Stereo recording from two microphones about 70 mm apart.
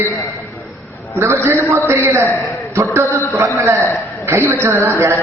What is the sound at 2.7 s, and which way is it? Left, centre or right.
Mantra, right.